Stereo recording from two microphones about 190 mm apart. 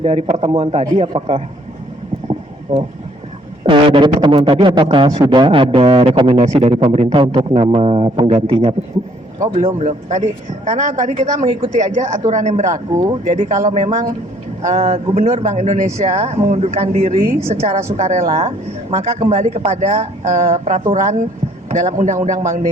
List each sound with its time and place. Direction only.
0.0 s speech: 30° right (ahead or behind)
2.7 s speech: 30° right (ahead or behind)